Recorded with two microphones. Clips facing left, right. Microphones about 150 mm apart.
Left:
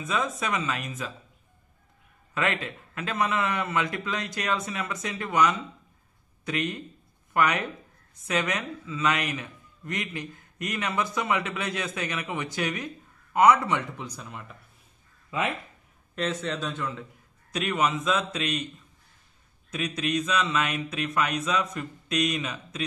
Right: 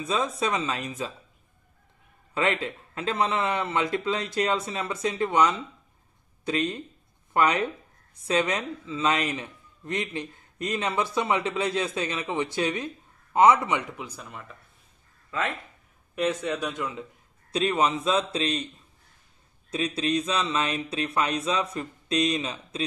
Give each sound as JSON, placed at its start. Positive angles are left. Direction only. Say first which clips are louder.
{"t": 0.0, "sound": "a man's voice", "louder": "right 2 dB", "side_deg": -30}
{"t": 2.3, "sound": "a man's voice", "louder": "right 2 dB", "side_deg": -30}
{"t": 13.9, "sound": "speech", "louder": "even", "side_deg": -5}
{"t": 16.2, "sound": "speech", "louder": "right 3 dB", "side_deg": -10}
{"t": 17.5, "sound": "a man's voice", "louder": "right 2 dB", "side_deg": -30}
{"t": 19.7, "sound": "a man's voice", "louder": "right 2 dB", "side_deg": -30}